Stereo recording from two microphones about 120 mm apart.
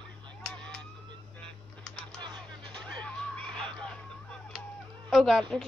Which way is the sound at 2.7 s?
10° left (ahead or behind).